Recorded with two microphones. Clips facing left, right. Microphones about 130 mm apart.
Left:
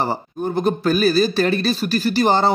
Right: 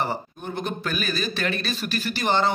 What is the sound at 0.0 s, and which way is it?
Speech, 35° left (ahead or behind).